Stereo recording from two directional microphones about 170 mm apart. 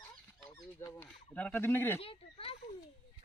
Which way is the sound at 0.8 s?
15° left (ahead or behind).